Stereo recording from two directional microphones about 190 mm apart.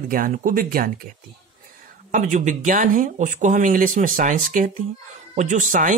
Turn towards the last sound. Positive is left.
turn(degrees=-40)  # may be behind; listen again after turning